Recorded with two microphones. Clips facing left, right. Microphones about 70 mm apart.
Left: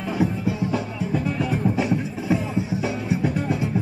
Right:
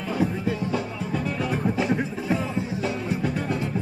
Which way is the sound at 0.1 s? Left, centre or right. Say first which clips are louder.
Left 1 dB; centre.